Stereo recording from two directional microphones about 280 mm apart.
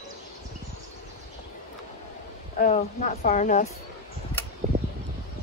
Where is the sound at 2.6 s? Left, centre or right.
Left.